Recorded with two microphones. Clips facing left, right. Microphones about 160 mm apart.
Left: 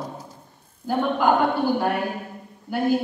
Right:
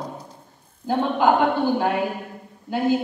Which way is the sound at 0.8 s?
20° right (ahead or behind).